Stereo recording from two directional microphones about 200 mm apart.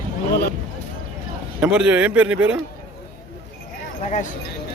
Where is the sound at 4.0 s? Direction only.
35° left (ahead or behind).